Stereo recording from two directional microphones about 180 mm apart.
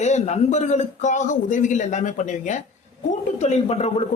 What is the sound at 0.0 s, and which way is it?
A man's voice, 40° left (ahead or behind).